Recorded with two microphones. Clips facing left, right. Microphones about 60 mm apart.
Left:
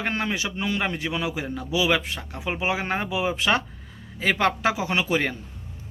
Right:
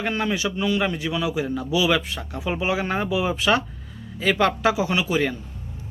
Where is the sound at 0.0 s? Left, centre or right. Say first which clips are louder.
Right 3 dB; left.